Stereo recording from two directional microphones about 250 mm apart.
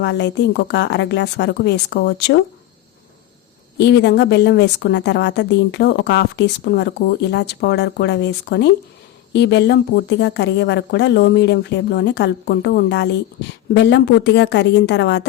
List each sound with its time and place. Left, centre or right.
0.0 s a woman's voice: left
3.8 s a woman's voice: left